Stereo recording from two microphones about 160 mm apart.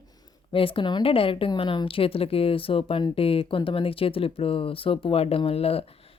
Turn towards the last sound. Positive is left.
turn(degrees=40)  # may be behind; listen again after turning